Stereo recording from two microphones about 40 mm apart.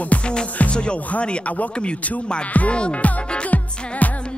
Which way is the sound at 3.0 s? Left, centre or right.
Left.